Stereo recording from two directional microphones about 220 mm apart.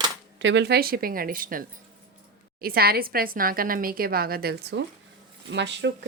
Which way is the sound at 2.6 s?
45° right (ahead or behind).